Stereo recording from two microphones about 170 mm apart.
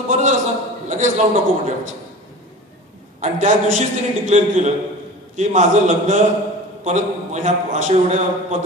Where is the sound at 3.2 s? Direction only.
45° right (ahead or behind).